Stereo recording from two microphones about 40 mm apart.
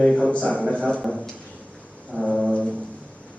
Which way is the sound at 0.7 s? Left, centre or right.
Left.